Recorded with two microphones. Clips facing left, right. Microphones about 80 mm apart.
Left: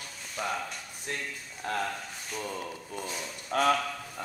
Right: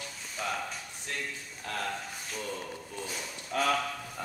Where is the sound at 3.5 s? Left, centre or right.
Left.